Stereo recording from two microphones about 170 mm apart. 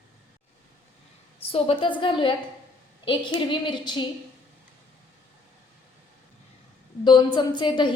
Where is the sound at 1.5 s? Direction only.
30° left (ahead or behind).